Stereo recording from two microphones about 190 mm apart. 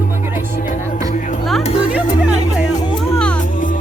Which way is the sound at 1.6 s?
30° left (ahead or behind).